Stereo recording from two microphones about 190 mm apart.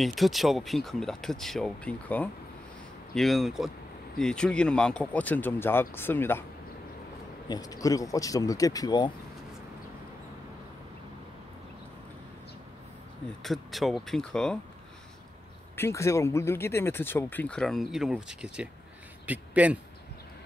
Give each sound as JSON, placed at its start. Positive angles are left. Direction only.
{"t": 0.0, "sound": "speech", "side_deg": 0}
{"t": 7.4, "sound": "speech", "side_deg": 20}
{"t": 13.4, "sound": "speech", "side_deg": 0}
{"t": 15.7, "sound": "a man's voice", "side_deg": 15}